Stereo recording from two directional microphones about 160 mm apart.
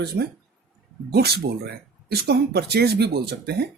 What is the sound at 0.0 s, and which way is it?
A man's voice, 85° right.